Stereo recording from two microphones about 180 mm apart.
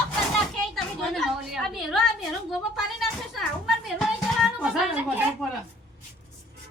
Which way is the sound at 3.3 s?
Centre (ahead or behind).